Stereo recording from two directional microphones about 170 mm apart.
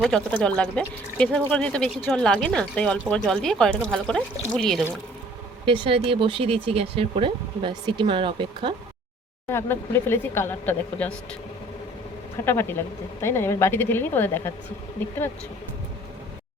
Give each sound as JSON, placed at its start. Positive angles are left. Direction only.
{"t": 0.0, "sound": "speech", "side_deg": 5}
{"t": 5.6, "sound": "speech", "side_deg": -30}
{"t": 9.5, "sound": "speech", "side_deg": 15}
{"t": 12.5, "sound": "speech", "side_deg": 15}